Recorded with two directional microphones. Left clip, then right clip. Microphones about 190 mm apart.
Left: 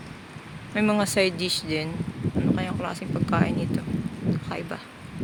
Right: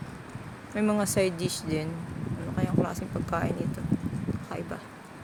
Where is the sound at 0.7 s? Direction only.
15° left (ahead or behind).